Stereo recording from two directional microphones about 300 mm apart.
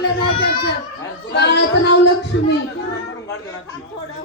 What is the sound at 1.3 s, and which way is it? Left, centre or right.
Speech, left.